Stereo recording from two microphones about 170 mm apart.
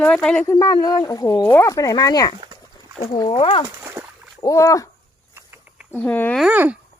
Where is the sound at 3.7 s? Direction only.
15° right (ahead or behind).